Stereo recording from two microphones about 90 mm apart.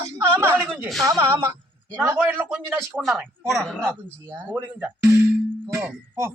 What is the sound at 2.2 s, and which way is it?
Speech, 20° right (ahead or behind).